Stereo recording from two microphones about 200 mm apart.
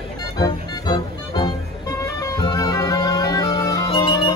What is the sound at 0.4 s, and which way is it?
Music, 20° left (ahead or behind).